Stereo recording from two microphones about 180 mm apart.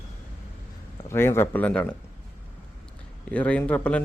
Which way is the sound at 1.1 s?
15° left (ahead or behind).